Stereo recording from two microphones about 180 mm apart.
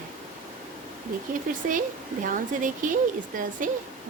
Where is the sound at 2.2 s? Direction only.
45° right (ahead or behind).